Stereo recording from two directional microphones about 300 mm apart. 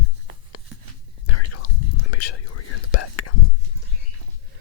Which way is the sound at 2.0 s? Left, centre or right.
Left.